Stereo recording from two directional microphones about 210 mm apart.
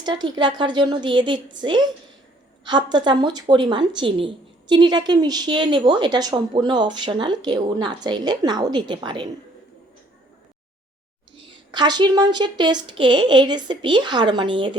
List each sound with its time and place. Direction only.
0.0 s a woman's voice: 20° right (ahead or behind)
11.3 s a woman's voice: 25° right (ahead or behind)